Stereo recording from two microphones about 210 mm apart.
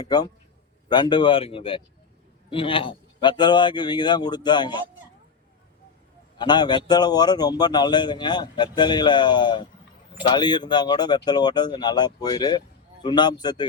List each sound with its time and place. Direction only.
0.0 s speech: 20° left (ahead or behind)
6.4 s speech: 20° left (ahead or behind)